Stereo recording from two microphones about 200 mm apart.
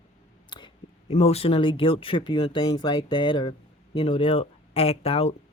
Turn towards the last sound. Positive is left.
turn(degrees=30)  # may be behind; listen again after turning